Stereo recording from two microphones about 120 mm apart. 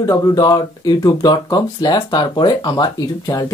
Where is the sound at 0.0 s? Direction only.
30° left (ahead or behind).